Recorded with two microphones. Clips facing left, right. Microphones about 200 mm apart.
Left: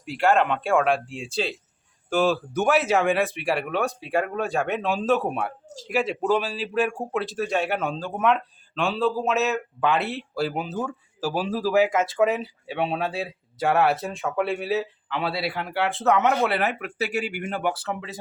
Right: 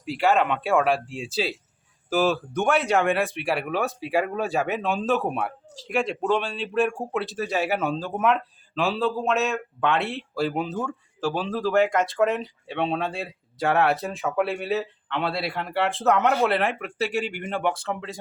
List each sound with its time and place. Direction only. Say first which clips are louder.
0.0 s speech: left 1 dB; centre (ahead or behind)
5.6 s speech: left 4 dB; 45° left (ahead or behind)
5.9 s speech: left 1 dB; 5° left (ahead or behind)